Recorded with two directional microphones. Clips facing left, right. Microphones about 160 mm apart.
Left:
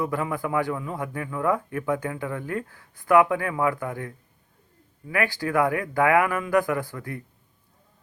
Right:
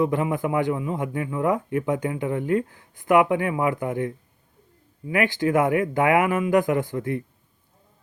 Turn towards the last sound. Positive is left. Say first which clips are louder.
# right 5 dB
turn(degrees=-20)  # may be behind; listen again after turning